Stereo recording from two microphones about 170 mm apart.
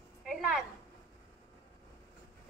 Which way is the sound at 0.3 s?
5° right (ahead or behind).